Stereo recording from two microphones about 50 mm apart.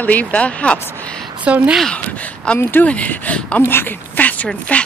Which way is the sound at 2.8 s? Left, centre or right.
Left.